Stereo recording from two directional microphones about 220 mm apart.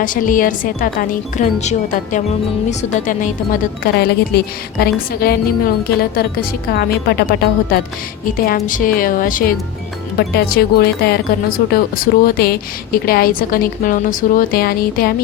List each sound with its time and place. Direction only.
0.0 s speech: 40° left (ahead or behind)